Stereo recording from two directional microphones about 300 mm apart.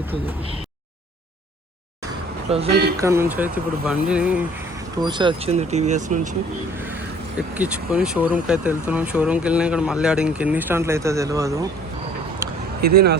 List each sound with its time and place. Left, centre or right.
2.5 s speech: centre
3.0 s speech: centre
5.0 s speech: centre
7.3 s speech: centre
12.8 s speech: right